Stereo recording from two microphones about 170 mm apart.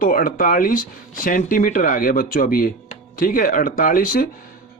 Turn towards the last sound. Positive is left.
turn(degrees=55)  # may be behind; listen again after turning